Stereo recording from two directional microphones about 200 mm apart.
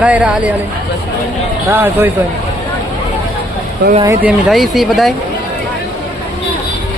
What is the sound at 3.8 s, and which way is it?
Speech, 55° right (ahead or behind).